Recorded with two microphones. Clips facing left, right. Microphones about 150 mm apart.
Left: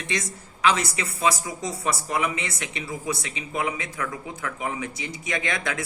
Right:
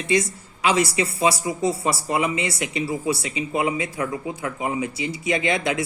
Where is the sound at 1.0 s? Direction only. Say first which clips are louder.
Right 4 dB; 25° right (ahead or behind).